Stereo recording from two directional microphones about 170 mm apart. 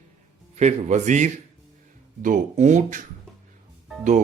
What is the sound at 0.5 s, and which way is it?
Speech, 45° right (ahead or behind).